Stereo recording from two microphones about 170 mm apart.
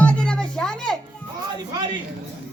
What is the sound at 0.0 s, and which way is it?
Music, 5° left (ahead or behind).